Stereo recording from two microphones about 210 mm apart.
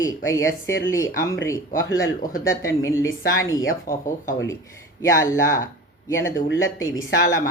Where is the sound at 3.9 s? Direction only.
40° left (ahead or behind).